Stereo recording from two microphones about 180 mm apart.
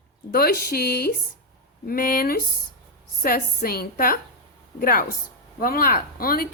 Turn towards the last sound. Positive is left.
turn(degrees=55)  # may be behind; listen again after turning